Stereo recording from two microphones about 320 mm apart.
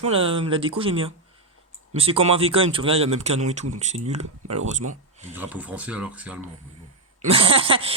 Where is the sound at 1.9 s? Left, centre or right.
Centre.